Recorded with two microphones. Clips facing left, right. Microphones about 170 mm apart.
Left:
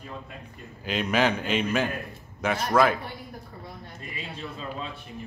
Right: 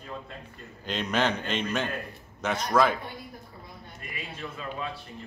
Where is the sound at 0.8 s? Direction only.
10° left (ahead or behind).